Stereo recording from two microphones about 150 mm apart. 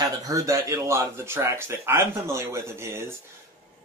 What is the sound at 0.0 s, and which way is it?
Speech, 25° right (ahead or behind).